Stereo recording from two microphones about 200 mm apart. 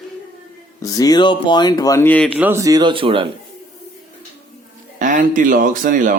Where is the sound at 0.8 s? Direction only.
15° left (ahead or behind).